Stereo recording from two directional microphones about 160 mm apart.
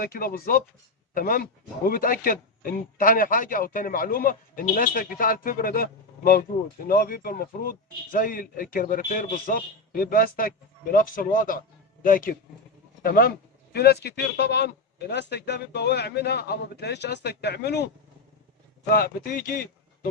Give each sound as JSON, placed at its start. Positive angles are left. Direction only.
{"t": 0.0, "sound": "speech", "side_deg": 70}
{"t": 13.7, "sound": "a man's voice", "side_deg": 85}
{"t": 18.9, "sound": "speech", "side_deg": 70}